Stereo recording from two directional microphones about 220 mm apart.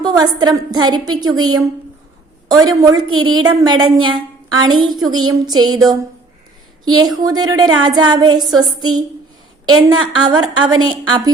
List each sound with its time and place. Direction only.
0.0 s a woman's voice: 20° right (ahead or behind)
2.5 s a sound: 15° right (ahead or behind)
3.2 s a woman's voice: 70° right (ahead or behind)
3.4 s a woman's voice: 20° right (ahead or behind)
4.8 s a sound: 20° right (ahead or behind)
7.8 s a woman's voice: 20° right (ahead or behind)